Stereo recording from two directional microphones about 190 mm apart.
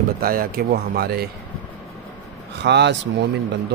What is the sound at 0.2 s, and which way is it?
Speech, 50° right (ahead or behind).